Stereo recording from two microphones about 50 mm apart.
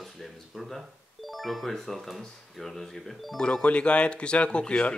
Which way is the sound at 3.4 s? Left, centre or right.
Left.